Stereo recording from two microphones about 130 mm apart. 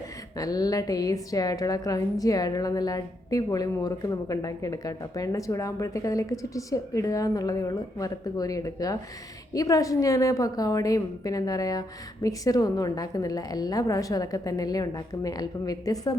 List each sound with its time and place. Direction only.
0.3 s a woman's voice: 30° left (ahead or behind)